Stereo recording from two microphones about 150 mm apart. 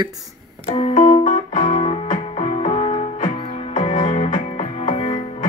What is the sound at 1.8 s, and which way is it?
Music, 40° left (ahead or behind).